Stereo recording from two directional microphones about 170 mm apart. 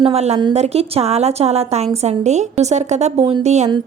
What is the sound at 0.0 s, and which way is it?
A woman's voice, 40° right (ahead or behind).